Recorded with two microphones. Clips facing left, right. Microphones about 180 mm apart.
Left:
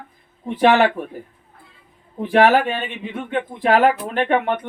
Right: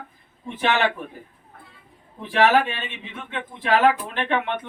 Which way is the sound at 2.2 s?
40° left (ahead or behind).